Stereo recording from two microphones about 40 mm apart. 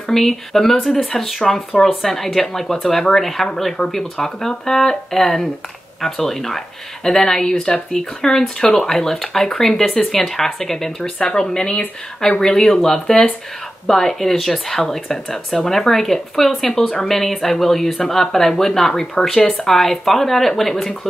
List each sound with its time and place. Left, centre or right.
0.1 s speech: centre
11.2 s speech: centre